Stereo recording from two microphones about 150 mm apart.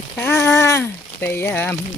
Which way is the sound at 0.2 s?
15° left (ahead or behind).